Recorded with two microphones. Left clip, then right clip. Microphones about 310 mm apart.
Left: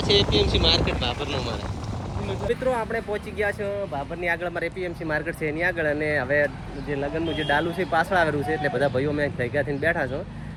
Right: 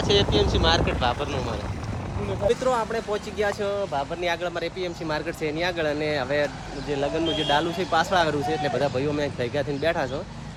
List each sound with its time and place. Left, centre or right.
0.0 s speech: centre
2.5 s speech: centre